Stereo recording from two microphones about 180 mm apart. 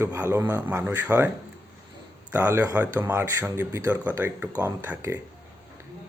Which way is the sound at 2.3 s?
10° right (ahead or behind).